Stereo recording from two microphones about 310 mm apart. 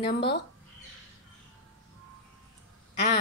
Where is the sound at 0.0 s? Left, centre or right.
Left.